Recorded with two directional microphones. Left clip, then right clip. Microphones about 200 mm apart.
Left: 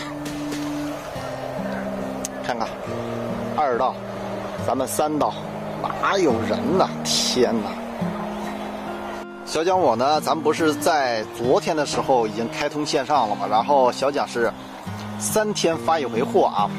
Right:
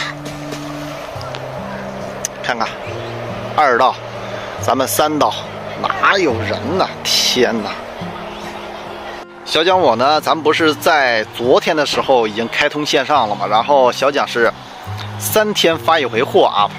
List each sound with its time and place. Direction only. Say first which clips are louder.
2.2 s vehicle: right 9 dB; 5° left (ahead or behind)
3.5 s speech: right 9 dB; 5° right (ahead or behind)
9.5 s speech: right 7 dB; centre (ahead or behind)